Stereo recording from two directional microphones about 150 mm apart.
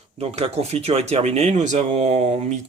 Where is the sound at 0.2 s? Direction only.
45° right (ahead or behind).